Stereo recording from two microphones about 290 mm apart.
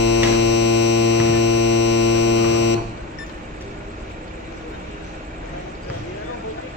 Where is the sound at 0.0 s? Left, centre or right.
Left.